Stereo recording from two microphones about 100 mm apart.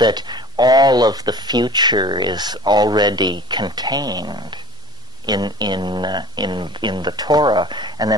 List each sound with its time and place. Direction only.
0.0 s speech: 45° right (ahead or behind)